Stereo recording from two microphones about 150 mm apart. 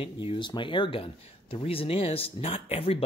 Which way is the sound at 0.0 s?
35° left (ahead or behind).